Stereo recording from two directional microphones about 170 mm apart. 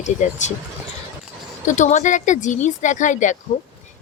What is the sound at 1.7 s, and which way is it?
A woman's voice, 45° left (ahead or behind).